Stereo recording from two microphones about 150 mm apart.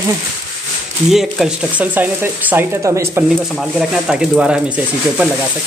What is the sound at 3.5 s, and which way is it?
A man's voice, centre (ahead or behind).